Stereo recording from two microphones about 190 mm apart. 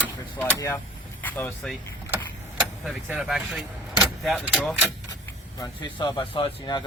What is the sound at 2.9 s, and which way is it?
Speech, centre (ahead or behind).